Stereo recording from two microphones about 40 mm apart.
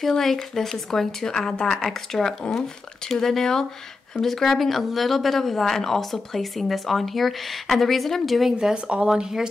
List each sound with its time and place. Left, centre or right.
0.1 s speech: centre
8.8 s speech: right
9.1 s speech: centre